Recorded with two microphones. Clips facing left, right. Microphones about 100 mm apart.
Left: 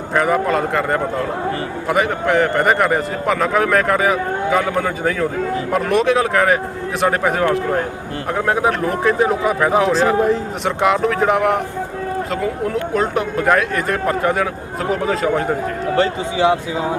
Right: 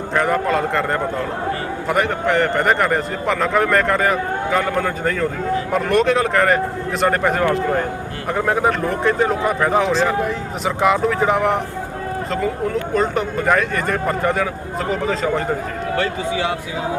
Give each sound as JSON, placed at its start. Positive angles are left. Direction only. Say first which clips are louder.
{"t": 0.1, "sound": "speech", "louder": "left 2 dB", "side_deg": 5}
{"t": 16.0, "sound": "speech", "louder": "left 4 dB", "side_deg": 25}